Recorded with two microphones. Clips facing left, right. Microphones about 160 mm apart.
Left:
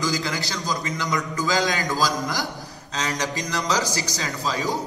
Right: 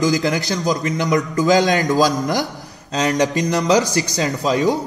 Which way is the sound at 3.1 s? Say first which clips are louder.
Right 11 dB; 55° right (ahead or behind).